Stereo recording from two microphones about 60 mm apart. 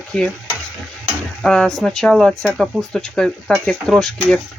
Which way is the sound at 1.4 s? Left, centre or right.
Centre.